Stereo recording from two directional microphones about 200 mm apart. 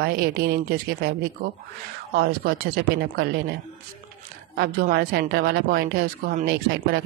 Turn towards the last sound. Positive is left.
turn(degrees=-50)  # may be behind; listen again after turning